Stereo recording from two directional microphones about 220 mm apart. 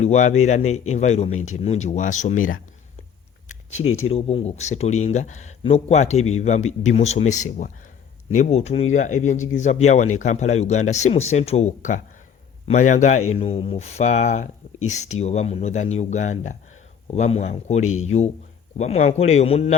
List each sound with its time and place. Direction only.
0.0 s speech: 30° left (ahead or behind)
3.5 s a sound: 30° left (ahead or behind)
4.0 s speech: 25° left (ahead or behind)